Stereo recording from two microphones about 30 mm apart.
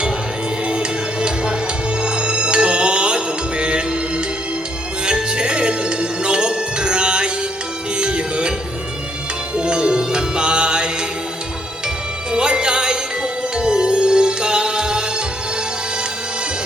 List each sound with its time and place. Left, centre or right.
0.7 s music: right
5.0 s music: right
9.6 s music: right
12.3 s music: right